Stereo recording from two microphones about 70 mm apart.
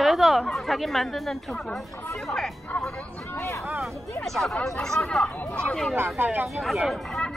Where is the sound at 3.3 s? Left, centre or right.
Left.